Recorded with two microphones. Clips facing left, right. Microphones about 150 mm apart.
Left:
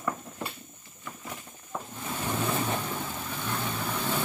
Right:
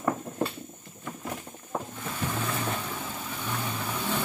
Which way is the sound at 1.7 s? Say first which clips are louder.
Right 4 dB; 40° right (ahead or behind).